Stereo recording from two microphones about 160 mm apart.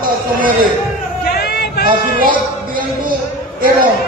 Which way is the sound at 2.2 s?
65° right (ahead or behind).